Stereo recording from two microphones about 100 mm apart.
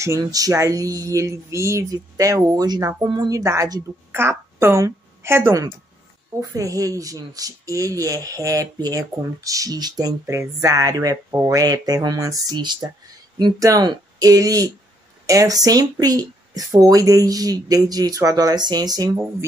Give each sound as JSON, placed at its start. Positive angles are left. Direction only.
{"t": 0.0, "sound": "a woman's voice", "side_deg": -35}
{"t": 13.4, "sound": "speech", "side_deg": -35}